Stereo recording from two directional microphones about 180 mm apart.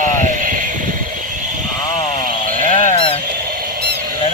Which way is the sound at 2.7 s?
35° left (ahead or behind).